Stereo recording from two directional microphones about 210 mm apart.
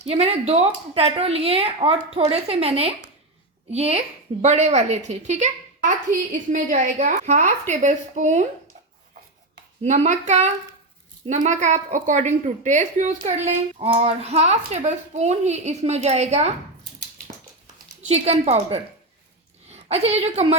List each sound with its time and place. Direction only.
0.0 s a woman's voice: 30° right (ahead or behind)
9.8 s a woman's voice: 35° right (ahead or behind)
18.1 s a woman's voice: 30° right (ahead or behind)